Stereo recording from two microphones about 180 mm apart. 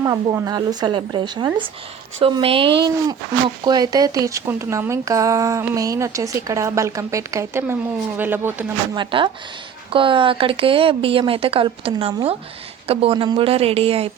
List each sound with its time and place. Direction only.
0.0 s a woman's voice: 20° right (ahead or behind)
9.0 s a woman's voice: 25° right (ahead or behind)